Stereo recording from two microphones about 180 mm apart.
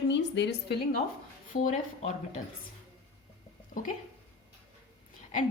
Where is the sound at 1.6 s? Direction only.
40° left (ahead or behind).